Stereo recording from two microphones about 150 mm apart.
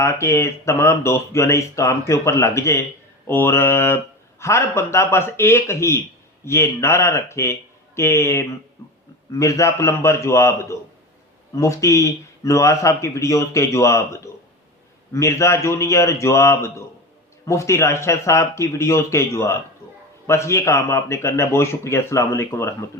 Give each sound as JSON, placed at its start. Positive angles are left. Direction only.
{"t": 0.0, "sound": "speech", "side_deg": 20}